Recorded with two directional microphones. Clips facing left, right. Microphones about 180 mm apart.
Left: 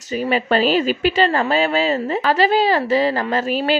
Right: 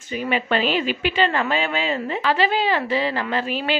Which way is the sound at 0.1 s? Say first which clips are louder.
Left 4 dB; 40° left (ahead or behind).